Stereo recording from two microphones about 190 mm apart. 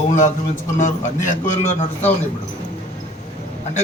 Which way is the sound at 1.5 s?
40° left (ahead or behind).